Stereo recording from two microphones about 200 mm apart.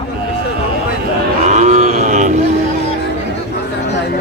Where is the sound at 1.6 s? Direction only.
35° right (ahead or behind).